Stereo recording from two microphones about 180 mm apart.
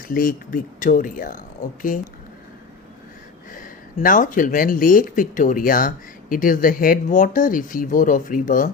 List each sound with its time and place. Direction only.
0.1 s speech: 50° left (ahead or behind)
3.5 s speech: 50° left (ahead or behind)